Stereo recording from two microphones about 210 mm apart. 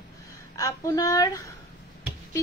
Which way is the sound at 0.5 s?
15° left (ahead or behind).